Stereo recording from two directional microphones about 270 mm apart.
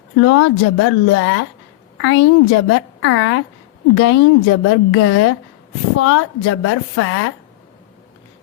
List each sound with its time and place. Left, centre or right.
0.2 s a woman's voice: left